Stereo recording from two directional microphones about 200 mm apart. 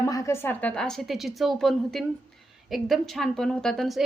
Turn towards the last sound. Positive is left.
turn(degrees=0)  # may be behind; listen again after turning